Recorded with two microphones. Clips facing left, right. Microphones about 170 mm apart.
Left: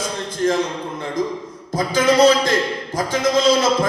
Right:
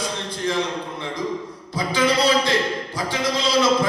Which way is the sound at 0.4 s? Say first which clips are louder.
Left 6 dB; 45° left (ahead or behind).